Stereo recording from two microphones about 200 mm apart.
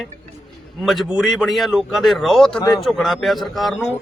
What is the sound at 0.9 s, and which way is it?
A man's voice, centre (ahead or behind).